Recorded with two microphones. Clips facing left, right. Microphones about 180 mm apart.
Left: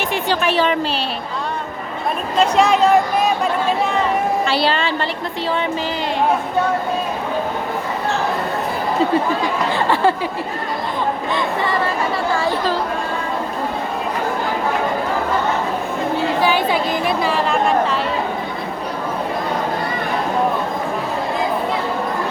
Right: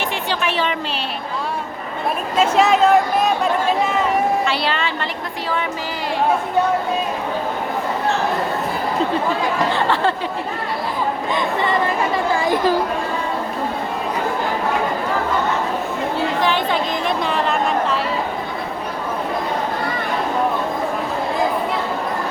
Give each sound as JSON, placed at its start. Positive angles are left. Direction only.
{"t": 0.3, "sound": "a sound", "side_deg": 40}
{"t": 2.4, "sound": "speech", "side_deg": 0}
{"t": 4.4, "sound": "a woman's voice", "side_deg": 30}
{"t": 16.4, "sound": "speech", "side_deg": 10}